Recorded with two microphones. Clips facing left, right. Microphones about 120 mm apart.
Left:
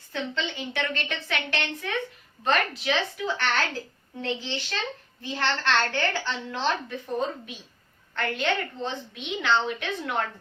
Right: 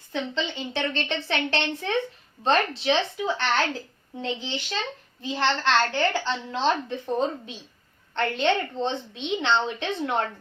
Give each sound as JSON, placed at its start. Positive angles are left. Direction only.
{"t": 0.1, "sound": "a woman's voice", "side_deg": -20}